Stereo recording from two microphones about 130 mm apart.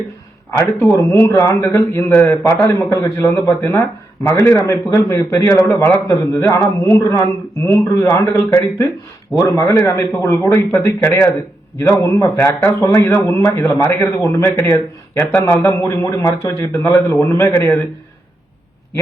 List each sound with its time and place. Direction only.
0.6 s a man's voice: 25° left (ahead or behind)